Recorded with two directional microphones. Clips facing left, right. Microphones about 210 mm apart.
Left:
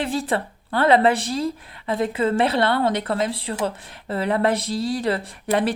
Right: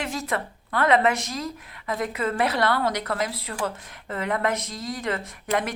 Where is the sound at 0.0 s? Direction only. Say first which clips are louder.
Left 5 dB; 30° left (ahead or behind).